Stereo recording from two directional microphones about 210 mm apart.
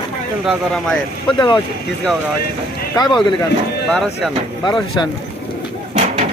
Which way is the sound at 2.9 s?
20° left (ahead or behind).